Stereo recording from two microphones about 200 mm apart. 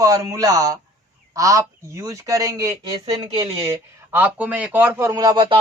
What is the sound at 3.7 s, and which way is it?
A man's voice, 10° right (ahead or behind).